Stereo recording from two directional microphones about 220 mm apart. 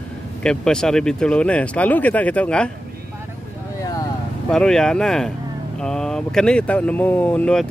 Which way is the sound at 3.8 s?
15° left (ahead or behind).